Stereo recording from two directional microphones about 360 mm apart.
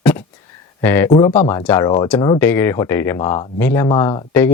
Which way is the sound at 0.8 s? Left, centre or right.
Centre.